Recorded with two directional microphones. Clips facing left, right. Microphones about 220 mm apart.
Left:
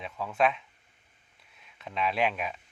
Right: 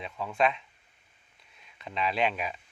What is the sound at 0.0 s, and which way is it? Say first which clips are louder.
A man's voice: even; centre (ahead or behind).